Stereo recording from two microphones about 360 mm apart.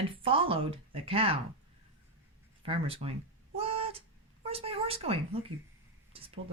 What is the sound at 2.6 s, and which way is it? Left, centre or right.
Speech, centre.